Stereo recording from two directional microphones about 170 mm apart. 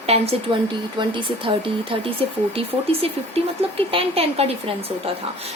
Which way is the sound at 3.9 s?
35° right (ahead or behind).